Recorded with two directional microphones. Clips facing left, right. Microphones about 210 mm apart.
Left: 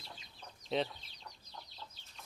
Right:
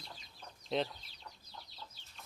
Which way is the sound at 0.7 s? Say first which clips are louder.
Even; centre (ahead or behind).